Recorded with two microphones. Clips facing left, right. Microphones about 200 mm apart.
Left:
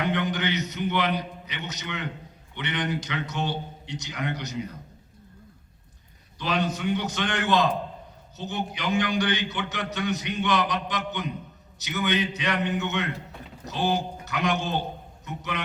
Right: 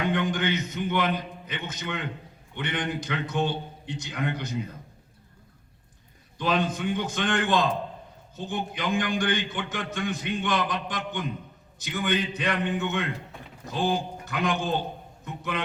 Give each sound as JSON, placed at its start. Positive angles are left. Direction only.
{"t": 0.0, "sound": "a man's voice", "side_deg": -50}
{"t": 6.4, "sound": "a man's voice", "side_deg": -50}